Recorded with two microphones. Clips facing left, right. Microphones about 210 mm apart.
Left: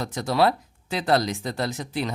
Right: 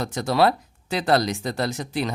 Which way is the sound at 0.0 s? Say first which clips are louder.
Right 2 dB; 75° right (ahead or behind).